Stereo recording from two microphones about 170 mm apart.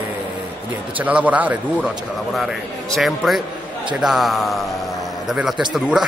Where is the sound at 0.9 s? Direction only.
10° right (ahead or behind).